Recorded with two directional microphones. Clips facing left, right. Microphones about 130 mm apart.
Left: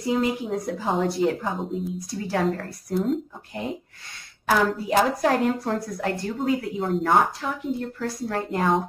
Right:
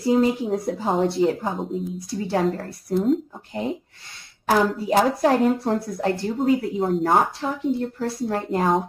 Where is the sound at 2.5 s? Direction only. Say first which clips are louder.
Right 2 dB; 30° right (ahead or behind).